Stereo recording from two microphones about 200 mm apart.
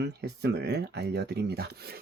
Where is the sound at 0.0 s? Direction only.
55° right (ahead or behind).